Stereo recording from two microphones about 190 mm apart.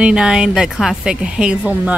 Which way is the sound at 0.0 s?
5° right (ahead or behind).